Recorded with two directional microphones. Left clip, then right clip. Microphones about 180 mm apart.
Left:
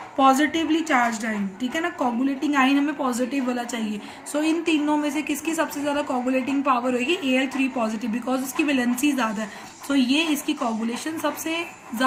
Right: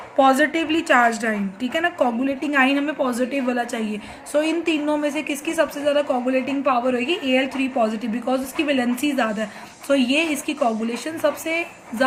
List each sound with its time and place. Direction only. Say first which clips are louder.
0.2 s a woman's voice: right 2 dB; 35° right (ahead or behind)